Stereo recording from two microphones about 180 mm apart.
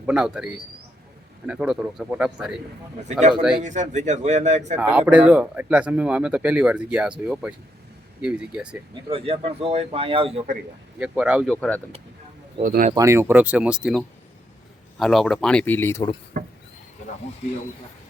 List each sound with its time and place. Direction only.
0.0 s speech: 5° right (ahead or behind)
3.1 s speech: 40° right (ahead or behind)
4.8 s speech: 5° right (ahead or behind)
9.0 s speech: 30° right (ahead or behind)
11.0 s speech: 5° right (ahead or behind)
11.5 s speech: 10° left (ahead or behind)
12.6 s speech: 50° right (ahead or behind)
12.9 s speech: 15° right (ahead or behind); by 16.0 s 15° left (ahead or behind)